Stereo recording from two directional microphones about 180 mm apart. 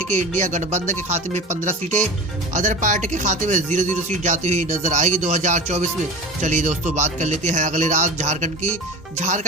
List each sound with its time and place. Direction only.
0.1 s speech: 40° right (ahead or behind)